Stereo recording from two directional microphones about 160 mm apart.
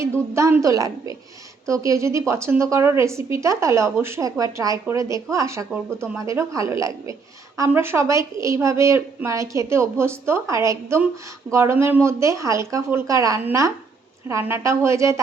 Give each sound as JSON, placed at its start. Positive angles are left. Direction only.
{"t": 0.0, "sound": "a woman's voice", "side_deg": -20}